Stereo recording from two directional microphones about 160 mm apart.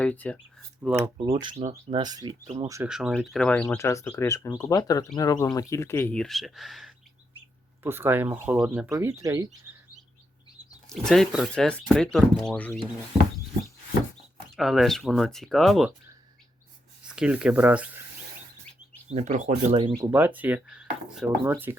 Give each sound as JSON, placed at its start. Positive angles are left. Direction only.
{"t": 0.0, "sound": "speech", "side_deg": 10}
{"t": 0.8, "sound": "speech", "side_deg": -10}
{"t": 1.3, "sound": "speech", "side_deg": -30}
{"t": 2.8, "sound": "speech", "side_deg": -5}
{"t": 3.8, "sound": "speech", "side_deg": 20}
{"t": 7.9, "sound": "speech", "side_deg": -15}
{"t": 8.9, "sound": "speech", "side_deg": -15}
{"t": 10.8, "sound": "speech", "side_deg": 0}
{"t": 14.5, "sound": "speech", "side_deg": 0}
{"t": 17.0, "sound": "speech", "side_deg": -5}
{"t": 19.0, "sound": "speech", "side_deg": -45}
{"t": 19.7, "sound": "speech", "side_deg": -30}
{"t": 20.0, "sound": "speech", "side_deg": -15}